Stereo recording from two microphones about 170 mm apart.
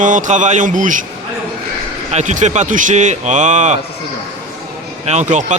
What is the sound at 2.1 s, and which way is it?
A man's voice, 45° right (ahead or behind).